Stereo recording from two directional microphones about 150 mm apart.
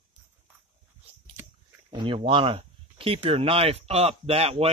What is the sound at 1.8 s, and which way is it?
Speech, 35° right (ahead or behind).